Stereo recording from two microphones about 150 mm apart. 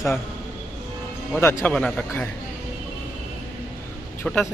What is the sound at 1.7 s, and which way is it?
Speech, 5° left (ahead or behind).